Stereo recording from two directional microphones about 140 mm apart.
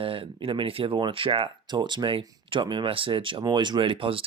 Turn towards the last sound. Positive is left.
turn(degrees=-40)  # may be behind; listen again after turning